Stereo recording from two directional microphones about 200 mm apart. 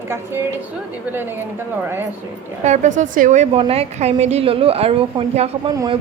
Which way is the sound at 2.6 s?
35° right (ahead or behind).